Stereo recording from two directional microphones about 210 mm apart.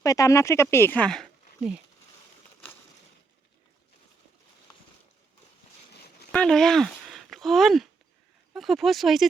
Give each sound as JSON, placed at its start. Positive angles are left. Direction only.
{"t": 0.0, "sound": "speech", "side_deg": 15}
{"t": 6.3, "sound": "speech", "side_deg": 5}